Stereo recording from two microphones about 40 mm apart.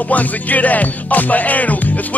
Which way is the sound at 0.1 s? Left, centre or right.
Left.